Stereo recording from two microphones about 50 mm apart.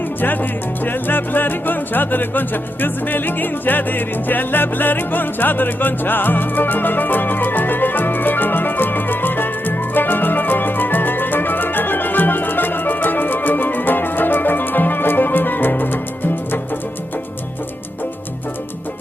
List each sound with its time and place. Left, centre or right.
0.9 s music: left